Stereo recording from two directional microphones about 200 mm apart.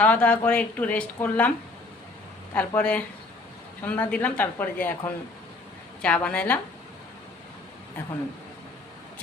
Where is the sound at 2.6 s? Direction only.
5° left (ahead or behind).